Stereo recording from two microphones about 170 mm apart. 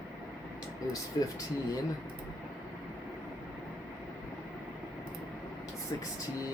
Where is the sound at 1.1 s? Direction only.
20° left (ahead or behind).